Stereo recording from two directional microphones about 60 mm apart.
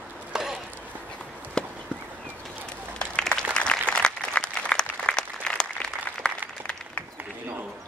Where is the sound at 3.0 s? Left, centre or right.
Centre.